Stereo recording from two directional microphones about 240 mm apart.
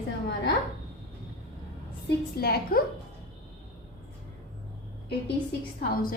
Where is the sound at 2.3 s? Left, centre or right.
Left.